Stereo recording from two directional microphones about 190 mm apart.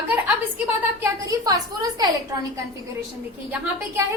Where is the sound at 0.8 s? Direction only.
15° right (ahead or behind).